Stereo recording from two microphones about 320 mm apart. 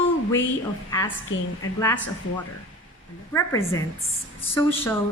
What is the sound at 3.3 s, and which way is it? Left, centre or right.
A woman's voice, centre.